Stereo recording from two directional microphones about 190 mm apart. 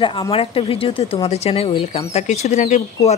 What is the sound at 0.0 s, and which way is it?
Speech, 25° left (ahead or behind).